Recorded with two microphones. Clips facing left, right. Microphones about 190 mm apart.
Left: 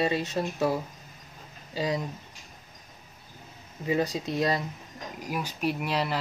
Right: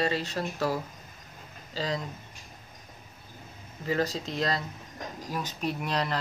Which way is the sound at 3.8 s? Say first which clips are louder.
Left 2 dB; 15° left (ahead or behind).